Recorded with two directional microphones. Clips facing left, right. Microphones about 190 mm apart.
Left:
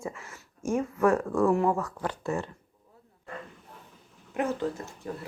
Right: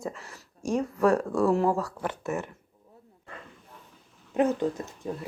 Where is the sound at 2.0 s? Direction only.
20° right (ahead or behind).